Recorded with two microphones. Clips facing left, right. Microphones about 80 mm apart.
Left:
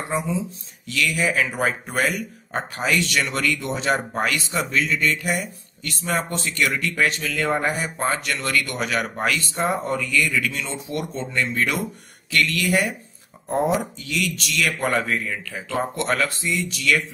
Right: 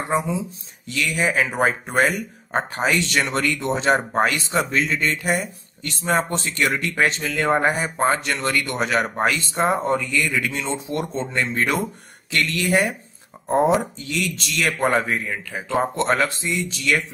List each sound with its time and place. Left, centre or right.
0.1 s speech: right